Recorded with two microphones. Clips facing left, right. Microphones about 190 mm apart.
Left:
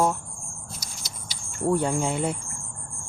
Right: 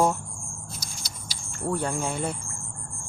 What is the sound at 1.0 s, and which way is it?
Cricket, 20° left (ahead or behind).